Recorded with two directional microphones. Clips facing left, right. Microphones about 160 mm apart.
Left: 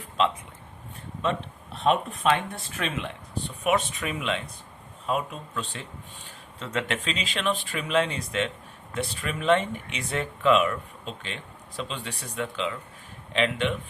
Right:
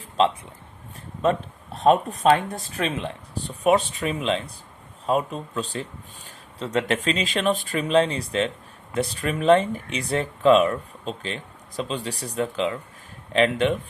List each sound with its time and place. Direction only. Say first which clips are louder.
1.2 s speech: right 6 dB; 40° right (ahead or behind)